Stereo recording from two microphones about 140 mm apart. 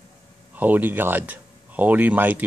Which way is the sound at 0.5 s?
10° right (ahead or behind).